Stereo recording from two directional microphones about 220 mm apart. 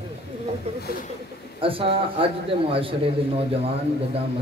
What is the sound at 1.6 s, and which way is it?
A man's voice, 25° right (ahead or behind).